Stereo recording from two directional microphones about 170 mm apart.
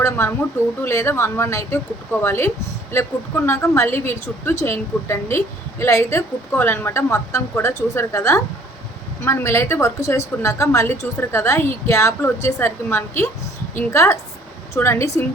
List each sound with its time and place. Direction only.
0.0 s a woman's voice: 15° left (ahead or behind)